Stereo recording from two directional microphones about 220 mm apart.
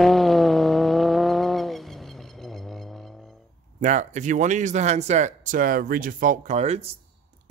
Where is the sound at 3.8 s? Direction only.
35° right (ahead or behind).